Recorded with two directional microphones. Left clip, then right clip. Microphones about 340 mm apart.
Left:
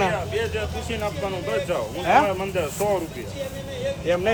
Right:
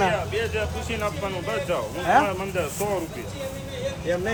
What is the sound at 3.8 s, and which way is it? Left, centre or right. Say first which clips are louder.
Vehicle: left 3 dB; centre.